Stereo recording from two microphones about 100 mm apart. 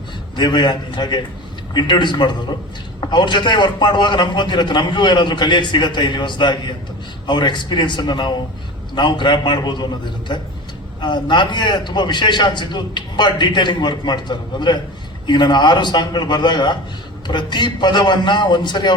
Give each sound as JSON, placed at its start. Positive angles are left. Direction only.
{"t": 0.3, "sound": "a man's voice", "side_deg": 50}